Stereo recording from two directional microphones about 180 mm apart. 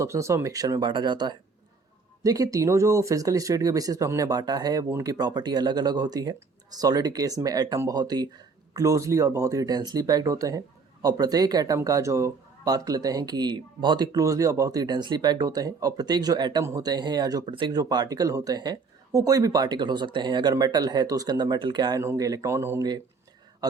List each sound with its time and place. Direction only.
0.0 s speech: 15° right (ahead or behind)